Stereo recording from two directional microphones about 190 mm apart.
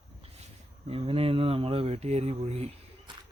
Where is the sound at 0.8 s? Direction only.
30° right (ahead or behind).